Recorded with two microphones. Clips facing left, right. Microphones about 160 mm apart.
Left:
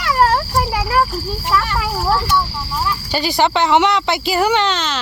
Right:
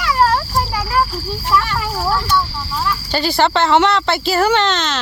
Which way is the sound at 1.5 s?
10° left (ahead or behind).